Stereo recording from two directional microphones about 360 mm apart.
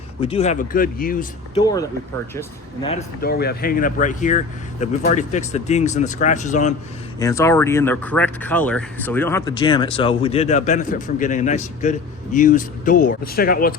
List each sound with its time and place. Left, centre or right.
0.2 s speech: centre
1.6 s speech: centre
7.2 s speech: centre; by 13.7 s left